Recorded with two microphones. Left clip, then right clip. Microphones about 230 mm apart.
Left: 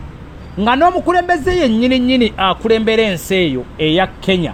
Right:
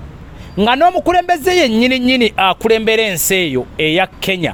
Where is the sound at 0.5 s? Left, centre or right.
Right.